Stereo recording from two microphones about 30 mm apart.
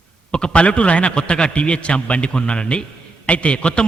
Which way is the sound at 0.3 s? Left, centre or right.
Left.